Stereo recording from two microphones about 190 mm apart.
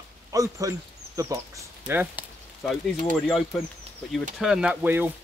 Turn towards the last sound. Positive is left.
turn(degrees=-10)  # may be behind; listen again after turning